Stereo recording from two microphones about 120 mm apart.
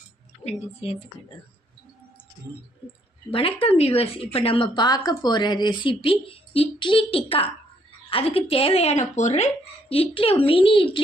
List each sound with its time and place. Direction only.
0.4 s speech: 55° left (ahead or behind)
3.6 s speech: 55° left (ahead or behind); by 9.5 s 75° left (ahead or behind)
9.9 s speech: 55° left (ahead or behind)